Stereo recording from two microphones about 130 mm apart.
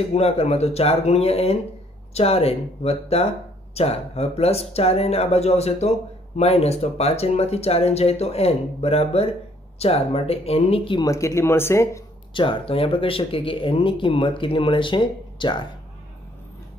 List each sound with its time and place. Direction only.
0.1 s speech: 50° left (ahead or behind)
11.0 s speech: 25° left (ahead or behind)
12.4 s speech: 45° left (ahead or behind)